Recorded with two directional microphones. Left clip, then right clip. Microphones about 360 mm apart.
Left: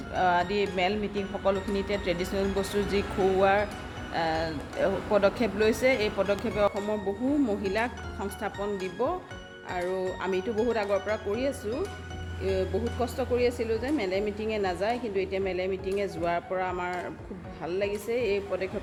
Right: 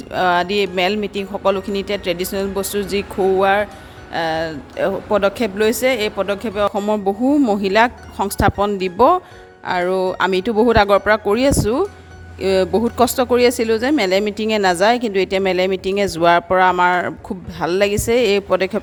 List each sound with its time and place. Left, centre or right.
0.1 s speech: right